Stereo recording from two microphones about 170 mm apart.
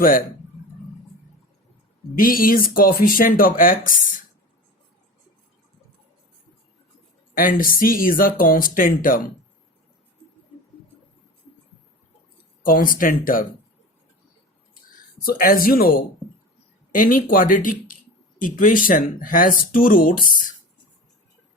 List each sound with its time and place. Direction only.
2.1 s speech: 55° left (ahead or behind)
7.3 s speech: 55° left (ahead or behind)
12.6 s speech: 55° left (ahead or behind)
15.2 s speech: 55° left (ahead or behind)